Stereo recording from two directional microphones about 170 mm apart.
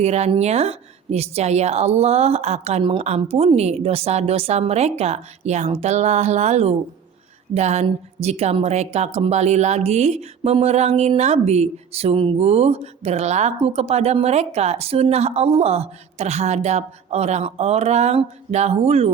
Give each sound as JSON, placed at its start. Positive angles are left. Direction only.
{"t": 0.0, "sound": "speech", "side_deg": -40}